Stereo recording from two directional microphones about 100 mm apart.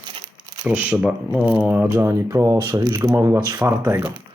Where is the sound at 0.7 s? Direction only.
15° right (ahead or behind).